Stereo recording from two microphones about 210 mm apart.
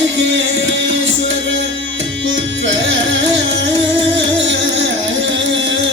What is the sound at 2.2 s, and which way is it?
Music, 60° right (ahead or behind).